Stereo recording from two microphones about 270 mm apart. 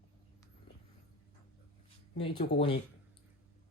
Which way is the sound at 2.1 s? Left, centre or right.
Centre.